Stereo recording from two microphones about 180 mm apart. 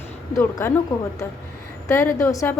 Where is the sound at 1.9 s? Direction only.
15° left (ahead or behind).